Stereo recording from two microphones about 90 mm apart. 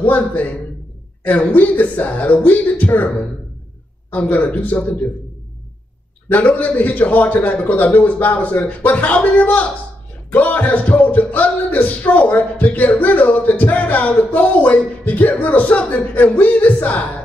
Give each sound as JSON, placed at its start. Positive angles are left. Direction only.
{"t": 0.0, "sound": "a man's voice", "side_deg": 20}
{"t": 1.2, "sound": "music", "side_deg": 20}
{"t": 4.1, "sound": "music", "side_deg": 20}
{"t": 6.2, "sound": "music", "side_deg": 20}